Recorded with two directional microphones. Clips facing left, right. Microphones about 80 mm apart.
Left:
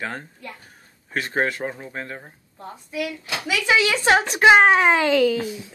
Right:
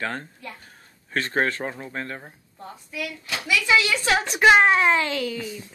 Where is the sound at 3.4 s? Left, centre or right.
Left.